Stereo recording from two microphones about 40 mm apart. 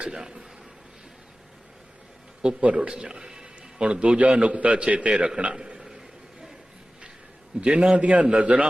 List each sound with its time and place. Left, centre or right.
0.0 s a man's voice: right
2.4 s a man's voice: right
5.5 s a sound: centre
7.6 s a man's voice: right
8.2 s a man's voice: right